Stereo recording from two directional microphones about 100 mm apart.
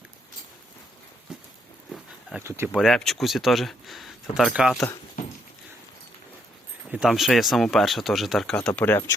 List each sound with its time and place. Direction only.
1.3 s a sound: 5° right (ahead or behind)
2.4 s speech: 25° right (ahead or behind)
2.7 s speech: centre (ahead or behind)
6.8 s speech: 10° right (ahead or behind)
8.5 s speech: 15° left (ahead or behind)